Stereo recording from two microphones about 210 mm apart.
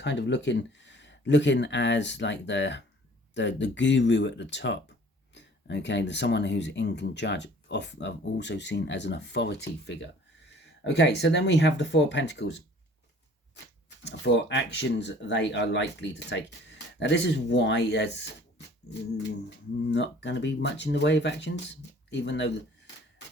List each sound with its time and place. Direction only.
0.0 s speech: 55° left (ahead or behind)
14.0 s speech: 55° left (ahead or behind)
19.9 s speech: 55° left (ahead or behind)